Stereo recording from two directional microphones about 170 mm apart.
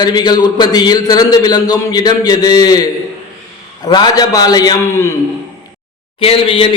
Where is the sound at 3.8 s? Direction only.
25° left (ahead or behind).